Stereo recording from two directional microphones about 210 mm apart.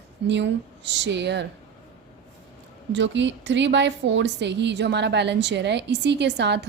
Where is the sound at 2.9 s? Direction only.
60° right (ahead or behind).